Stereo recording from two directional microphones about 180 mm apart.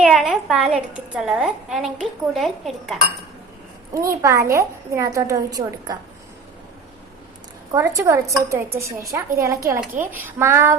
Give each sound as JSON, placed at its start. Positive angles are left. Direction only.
{"t": 0.0, "sound": "a woman's voice", "side_deg": 0}
{"t": 4.2, "sound": "a woman's voice", "side_deg": -15}
{"t": 7.7, "sound": "a woman's voice", "side_deg": -20}